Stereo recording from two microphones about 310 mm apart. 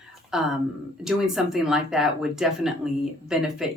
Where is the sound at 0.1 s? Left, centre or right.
Centre.